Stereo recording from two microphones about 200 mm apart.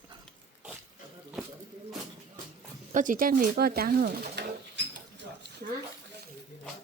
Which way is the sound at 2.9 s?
40° right (ahead or behind).